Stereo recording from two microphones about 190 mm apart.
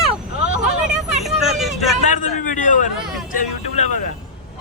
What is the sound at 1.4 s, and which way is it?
Vehicle, centre (ahead or behind).